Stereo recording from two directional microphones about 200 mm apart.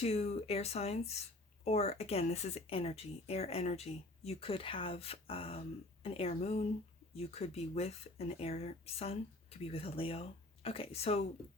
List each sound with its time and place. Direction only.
0.0 s speech: 30° left (ahead or behind)